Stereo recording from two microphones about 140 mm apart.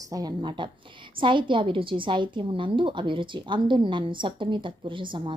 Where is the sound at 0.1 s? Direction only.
30° right (ahead or behind).